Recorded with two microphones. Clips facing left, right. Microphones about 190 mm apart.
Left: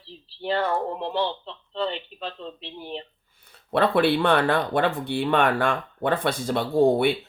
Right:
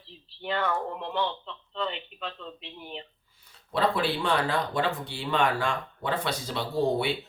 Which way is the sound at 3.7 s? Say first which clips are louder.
Left 6 dB; 60° left (ahead or behind).